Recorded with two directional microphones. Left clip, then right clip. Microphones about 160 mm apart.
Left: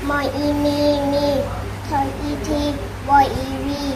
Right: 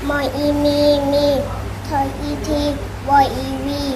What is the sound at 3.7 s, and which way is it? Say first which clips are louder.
Child singing: right 3 dB; 30° right (ahead or behind).